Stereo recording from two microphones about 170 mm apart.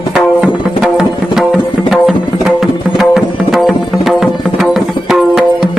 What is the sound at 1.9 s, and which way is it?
Music, centre (ahead or behind).